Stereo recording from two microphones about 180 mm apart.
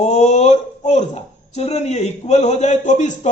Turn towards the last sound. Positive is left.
turn(degrees=40)  # may be behind; listen again after turning